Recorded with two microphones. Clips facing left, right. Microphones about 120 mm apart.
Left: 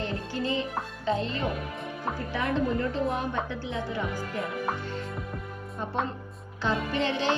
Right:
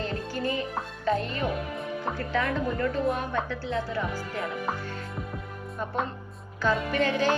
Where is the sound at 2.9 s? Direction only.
20° left (ahead or behind).